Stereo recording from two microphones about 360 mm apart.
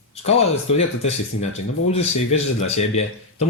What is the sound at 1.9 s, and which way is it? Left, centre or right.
Speech, centre.